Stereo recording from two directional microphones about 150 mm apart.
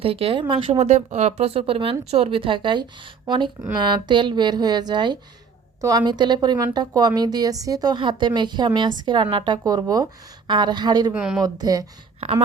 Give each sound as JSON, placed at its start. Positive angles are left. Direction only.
{"t": 0.0, "sound": "speech", "side_deg": -40}
{"t": 11.1, "sound": "speech", "side_deg": -5}
{"t": 11.3, "sound": "speech", "side_deg": -25}